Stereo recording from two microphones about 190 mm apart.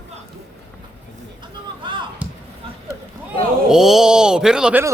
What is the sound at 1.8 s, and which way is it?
Basketball bounce, 25° right (ahead or behind).